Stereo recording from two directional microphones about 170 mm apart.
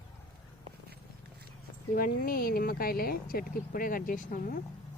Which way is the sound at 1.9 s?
55° left (ahead or behind).